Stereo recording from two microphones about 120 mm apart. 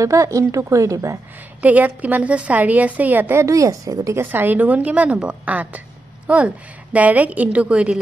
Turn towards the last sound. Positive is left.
turn(degrees=-10)  # may be behind; listen again after turning